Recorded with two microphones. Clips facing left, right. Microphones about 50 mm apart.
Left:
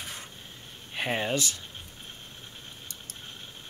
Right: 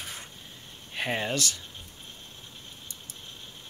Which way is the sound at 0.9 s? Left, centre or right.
Centre.